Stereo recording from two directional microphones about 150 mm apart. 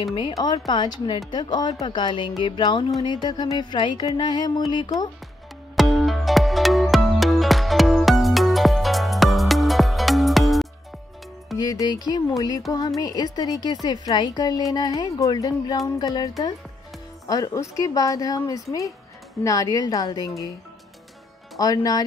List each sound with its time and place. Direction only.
0.4 s music: 30° left (ahead or behind)
5.8 s music: centre (ahead or behind)
11.5 s music: 25° left (ahead or behind)
21.5 s music: 25° left (ahead or behind)